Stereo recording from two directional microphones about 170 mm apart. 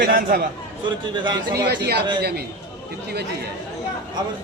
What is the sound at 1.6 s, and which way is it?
Speech, 70° right (ahead or behind).